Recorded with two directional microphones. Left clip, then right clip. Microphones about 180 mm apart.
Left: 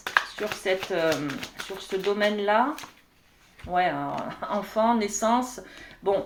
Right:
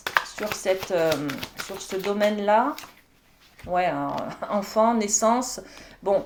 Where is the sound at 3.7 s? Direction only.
35° right (ahead or behind).